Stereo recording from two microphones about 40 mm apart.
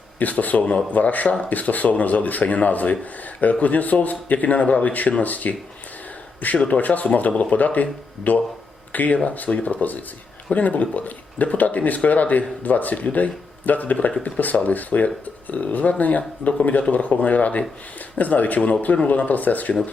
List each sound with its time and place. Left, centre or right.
0.2 s speech: left